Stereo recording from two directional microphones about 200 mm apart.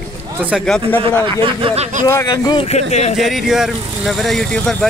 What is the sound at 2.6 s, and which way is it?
Speech, 35° left (ahead or behind).